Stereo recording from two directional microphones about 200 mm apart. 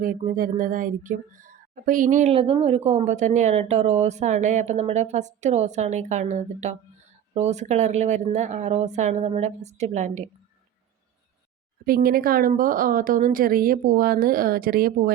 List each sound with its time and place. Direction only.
0.0 s speech: 45° right (ahead or behind)
11.9 s a woman's voice: 45° right (ahead or behind)